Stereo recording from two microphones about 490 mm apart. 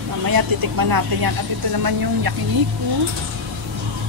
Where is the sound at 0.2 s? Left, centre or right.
Right.